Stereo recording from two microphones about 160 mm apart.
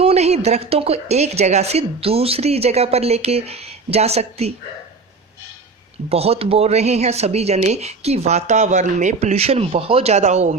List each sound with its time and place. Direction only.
0.0 s a woman's voice: 40° right (ahead or behind)
6.1 s a woman's voice: 40° right (ahead or behind)